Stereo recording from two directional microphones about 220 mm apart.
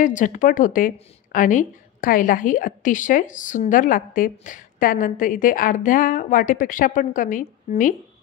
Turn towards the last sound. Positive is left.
turn(degrees=35)  # may be behind; listen again after turning